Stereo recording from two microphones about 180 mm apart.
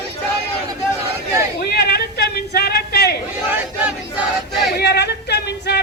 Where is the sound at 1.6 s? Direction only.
60° left (ahead or behind).